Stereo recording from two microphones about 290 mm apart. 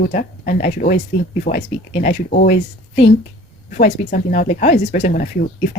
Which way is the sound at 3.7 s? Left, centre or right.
Left.